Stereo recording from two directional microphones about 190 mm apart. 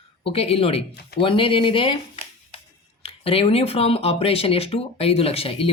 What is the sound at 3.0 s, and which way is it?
Speech, 30° left (ahead or behind).